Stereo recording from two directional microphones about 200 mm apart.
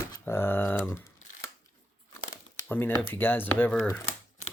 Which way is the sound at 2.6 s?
10° left (ahead or behind).